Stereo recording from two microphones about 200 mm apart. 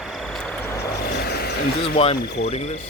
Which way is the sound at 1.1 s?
50° left (ahead or behind).